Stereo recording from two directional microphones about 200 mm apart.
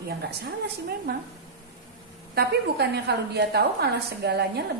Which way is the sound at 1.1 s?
50° right (ahead or behind).